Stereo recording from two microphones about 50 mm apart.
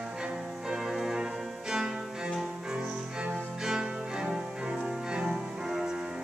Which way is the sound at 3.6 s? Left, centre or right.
Centre.